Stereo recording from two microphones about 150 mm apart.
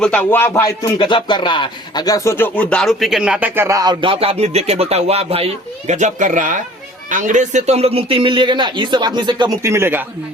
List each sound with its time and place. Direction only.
0.0 s music: 10° left (ahead or behind)
0.9 s speech: 30° left (ahead or behind); by 5.5 s 40° right (ahead or behind)
5.9 s a man's voice: 55° right (ahead or behind); by 9.6 s 30° right (ahead or behind)
9.6 s speech: 15° right (ahead or behind)